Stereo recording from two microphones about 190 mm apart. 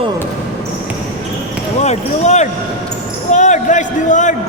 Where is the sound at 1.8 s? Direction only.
35° left (ahead or behind).